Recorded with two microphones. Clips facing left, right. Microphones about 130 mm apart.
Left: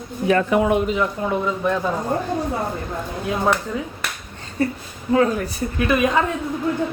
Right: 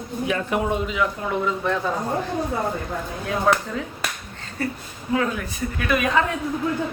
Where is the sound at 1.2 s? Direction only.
15° left (ahead or behind).